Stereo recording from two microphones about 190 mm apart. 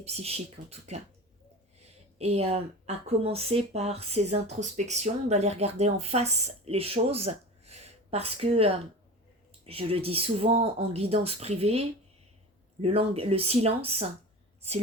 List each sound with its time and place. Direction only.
0.0 s a woman's voice: 35° right (ahead or behind)